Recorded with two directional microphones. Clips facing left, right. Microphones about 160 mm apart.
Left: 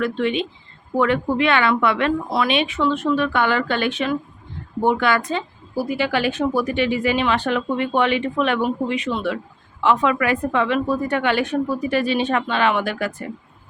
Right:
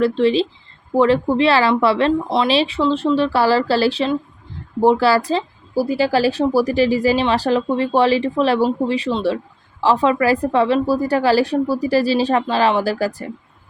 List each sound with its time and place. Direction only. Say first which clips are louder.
0.0 s speech: right 6 dB; 30° right (ahead or behind)